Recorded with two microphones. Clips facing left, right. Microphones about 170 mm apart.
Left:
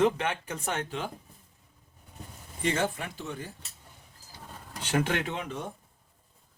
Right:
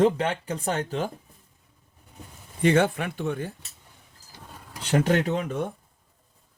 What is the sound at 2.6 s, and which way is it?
Speech, 60° right (ahead or behind).